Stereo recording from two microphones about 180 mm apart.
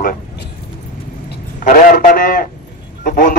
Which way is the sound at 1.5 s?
45° left (ahead or behind).